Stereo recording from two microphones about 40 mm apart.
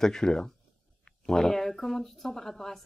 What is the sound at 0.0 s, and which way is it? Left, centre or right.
Speech, centre.